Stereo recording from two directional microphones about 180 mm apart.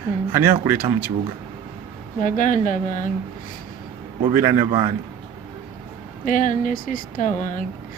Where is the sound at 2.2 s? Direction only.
45° left (ahead or behind).